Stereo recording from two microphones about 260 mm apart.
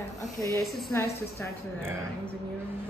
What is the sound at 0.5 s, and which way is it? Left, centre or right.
Speech, centre.